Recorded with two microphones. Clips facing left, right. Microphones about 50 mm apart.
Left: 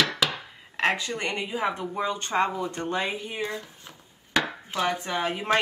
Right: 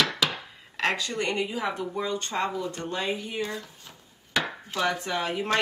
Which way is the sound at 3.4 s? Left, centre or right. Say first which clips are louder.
Left 2 dB; centre.